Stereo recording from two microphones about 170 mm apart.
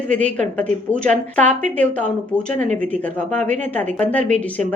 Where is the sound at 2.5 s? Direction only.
45° right (ahead or behind).